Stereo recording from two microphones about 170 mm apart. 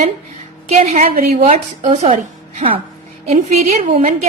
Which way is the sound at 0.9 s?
60° right (ahead or behind).